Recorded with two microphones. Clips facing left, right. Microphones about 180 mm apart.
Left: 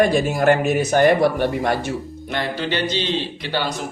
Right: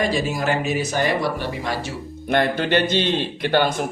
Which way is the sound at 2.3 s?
55° right (ahead or behind).